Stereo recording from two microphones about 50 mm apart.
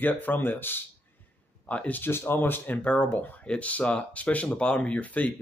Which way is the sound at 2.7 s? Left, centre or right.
Left.